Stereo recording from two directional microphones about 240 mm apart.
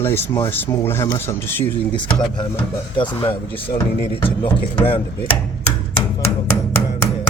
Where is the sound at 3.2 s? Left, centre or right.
Centre.